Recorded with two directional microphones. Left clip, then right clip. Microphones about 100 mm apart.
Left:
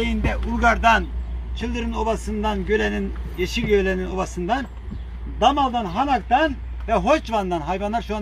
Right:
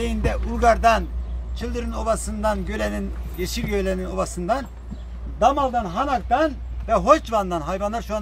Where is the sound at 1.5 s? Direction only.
60° right (ahead or behind).